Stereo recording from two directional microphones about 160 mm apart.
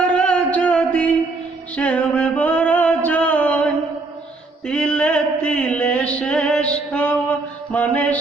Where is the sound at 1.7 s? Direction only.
10° left (ahead or behind).